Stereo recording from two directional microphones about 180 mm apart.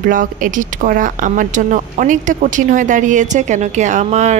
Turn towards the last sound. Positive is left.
turn(degrees=-40)  # may be behind; listen again after turning